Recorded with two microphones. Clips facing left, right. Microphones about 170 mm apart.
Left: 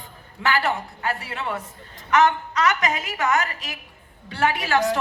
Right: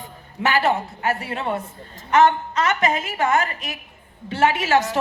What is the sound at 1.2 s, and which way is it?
A woman's voice, 35° right (ahead or behind).